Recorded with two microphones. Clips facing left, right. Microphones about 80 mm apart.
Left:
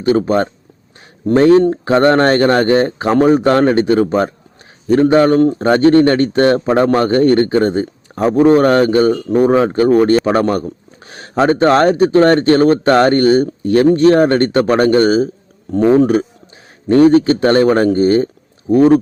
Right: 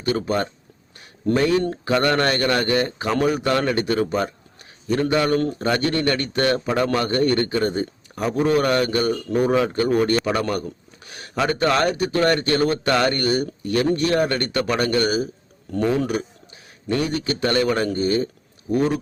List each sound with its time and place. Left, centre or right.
0.0 s a man's voice: left